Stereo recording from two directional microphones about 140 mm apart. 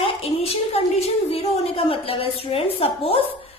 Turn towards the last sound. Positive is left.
turn(degrees=40)  # may be behind; listen again after turning